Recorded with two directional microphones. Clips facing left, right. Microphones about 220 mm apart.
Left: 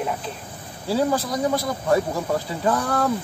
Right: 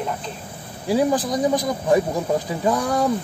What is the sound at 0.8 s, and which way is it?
Speech, 15° right (ahead or behind).